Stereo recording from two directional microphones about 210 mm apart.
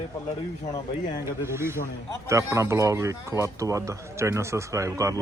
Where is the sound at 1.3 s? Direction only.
10° right (ahead or behind).